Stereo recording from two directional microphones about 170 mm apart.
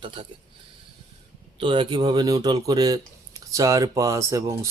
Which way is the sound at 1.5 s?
30° right (ahead or behind).